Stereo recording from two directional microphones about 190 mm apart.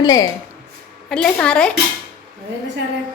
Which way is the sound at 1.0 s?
5° left (ahead or behind).